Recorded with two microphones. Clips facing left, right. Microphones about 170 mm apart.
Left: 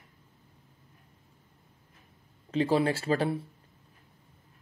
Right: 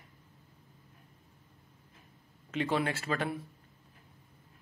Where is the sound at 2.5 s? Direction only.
30° left (ahead or behind).